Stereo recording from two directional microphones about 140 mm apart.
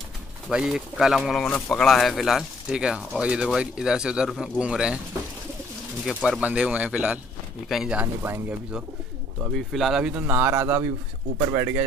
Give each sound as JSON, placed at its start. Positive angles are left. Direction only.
{"t": 0.5, "sound": "speech", "side_deg": -5}
{"t": 6.0, "sound": "a man's voice", "side_deg": 0}
{"t": 9.4, "sound": "a man's voice", "side_deg": 0}